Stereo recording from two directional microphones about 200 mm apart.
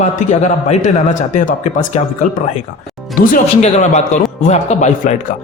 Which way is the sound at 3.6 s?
35° left (ahead or behind).